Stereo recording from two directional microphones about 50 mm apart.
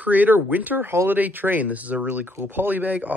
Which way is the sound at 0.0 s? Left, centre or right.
Right.